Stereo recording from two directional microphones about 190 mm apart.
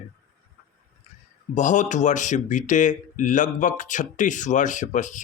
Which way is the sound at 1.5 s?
40° left (ahead or behind).